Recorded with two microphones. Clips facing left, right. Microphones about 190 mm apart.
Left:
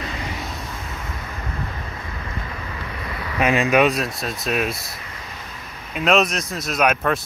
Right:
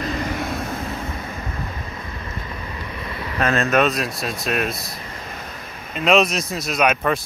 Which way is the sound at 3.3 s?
15° left (ahead or behind).